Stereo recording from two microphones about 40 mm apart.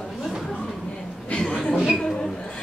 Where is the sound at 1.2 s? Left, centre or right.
Left.